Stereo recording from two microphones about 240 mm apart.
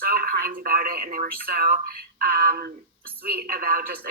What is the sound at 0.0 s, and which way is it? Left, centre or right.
Speech, right.